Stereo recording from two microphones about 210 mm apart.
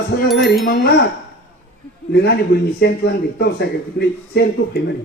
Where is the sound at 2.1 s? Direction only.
50° left (ahead or behind).